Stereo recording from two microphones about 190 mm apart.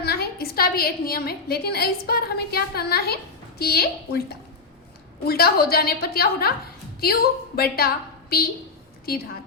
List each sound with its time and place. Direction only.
0.0 s a woman's voice: 55° left (ahead or behind)
5.2 s a woman's voice: 55° left (ahead or behind)